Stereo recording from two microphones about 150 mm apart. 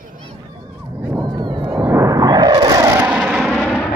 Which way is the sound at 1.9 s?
20° right (ahead or behind).